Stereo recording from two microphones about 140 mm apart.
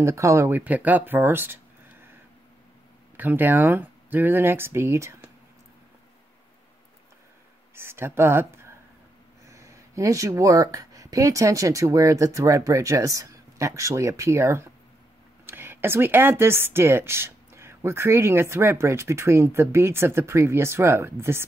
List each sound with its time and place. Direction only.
0.0 s speech: 20° right (ahead or behind)
3.2 s a woman's voice: 15° right (ahead or behind)
7.7 s a woman's voice: 15° right (ahead or behind)
9.5 s a woman's voice: 20° right (ahead or behind)